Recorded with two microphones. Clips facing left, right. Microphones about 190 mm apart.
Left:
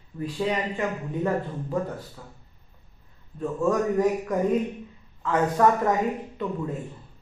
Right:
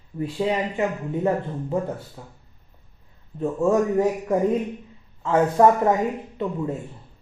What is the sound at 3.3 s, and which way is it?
A man's voice, 25° right (ahead or behind).